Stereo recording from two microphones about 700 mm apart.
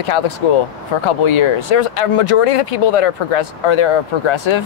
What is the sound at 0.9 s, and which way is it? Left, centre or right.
Speech, left.